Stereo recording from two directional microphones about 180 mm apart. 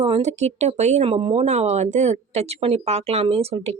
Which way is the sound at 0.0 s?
35° right (ahead or behind).